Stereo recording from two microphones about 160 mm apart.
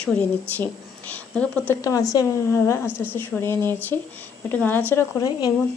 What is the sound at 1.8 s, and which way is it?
A woman's voice, 20° left (ahead or behind).